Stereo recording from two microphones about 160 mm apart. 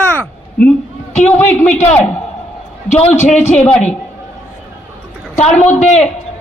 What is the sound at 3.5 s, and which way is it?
Speech, 10° left (ahead or behind).